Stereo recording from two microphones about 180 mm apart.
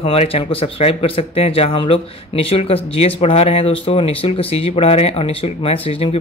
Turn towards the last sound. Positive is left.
turn(degrees=30)  # may be behind; listen again after turning